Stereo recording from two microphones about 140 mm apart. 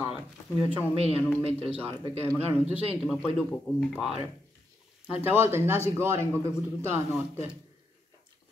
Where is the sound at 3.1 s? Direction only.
5° right (ahead or behind).